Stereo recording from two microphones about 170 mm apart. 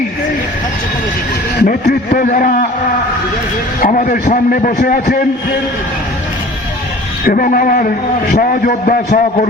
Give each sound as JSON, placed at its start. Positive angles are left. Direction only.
{"t": 1.6, "sound": "a man's voice", "side_deg": 55}
{"t": 3.8, "sound": "a man's voice", "side_deg": 50}
{"t": 7.3, "sound": "a man's voice", "side_deg": 55}